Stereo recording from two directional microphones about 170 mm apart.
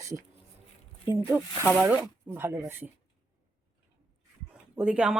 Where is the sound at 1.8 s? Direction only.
10° right (ahead or behind).